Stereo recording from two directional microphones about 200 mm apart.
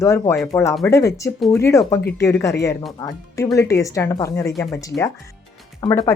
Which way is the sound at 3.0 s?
15° left (ahead or behind).